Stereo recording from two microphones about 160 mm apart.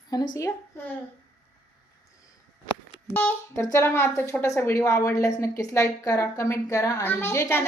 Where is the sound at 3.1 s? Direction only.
15° left (ahead or behind).